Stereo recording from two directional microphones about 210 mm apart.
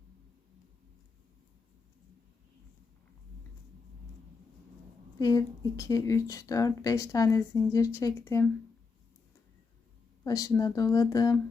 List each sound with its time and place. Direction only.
5.2 s speech: 15° left (ahead or behind)
10.2 s speech: 15° left (ahead or behind)